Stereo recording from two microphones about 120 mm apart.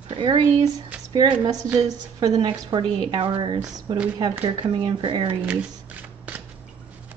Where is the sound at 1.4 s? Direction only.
30° right (ahead or behind).